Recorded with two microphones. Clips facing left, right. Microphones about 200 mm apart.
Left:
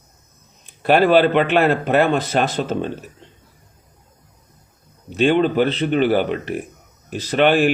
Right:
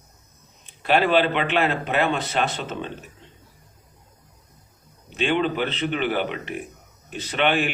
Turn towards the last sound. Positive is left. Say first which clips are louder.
# left 7 dB
turn(degrees=45)  # may be behind; listen again after turning